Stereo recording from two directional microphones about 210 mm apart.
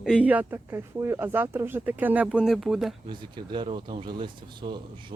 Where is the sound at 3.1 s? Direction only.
20° right (ahead or behind).